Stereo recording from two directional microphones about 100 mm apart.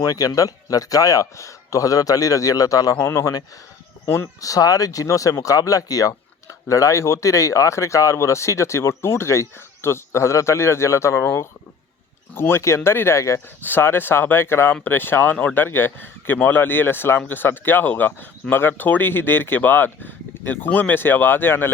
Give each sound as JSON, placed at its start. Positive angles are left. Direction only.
{"t": 0.0, "sound": "a man's voice", "side_deg": 40}